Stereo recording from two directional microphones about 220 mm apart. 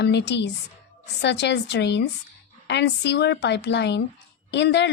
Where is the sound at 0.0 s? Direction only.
50° left (ahead or behind).